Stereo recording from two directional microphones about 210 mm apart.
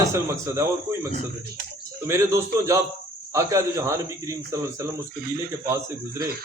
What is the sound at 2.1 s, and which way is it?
Speech, 15° right (ahead or behind).